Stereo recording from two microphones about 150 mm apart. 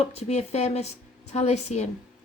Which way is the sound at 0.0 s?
45° left (ahead or behind).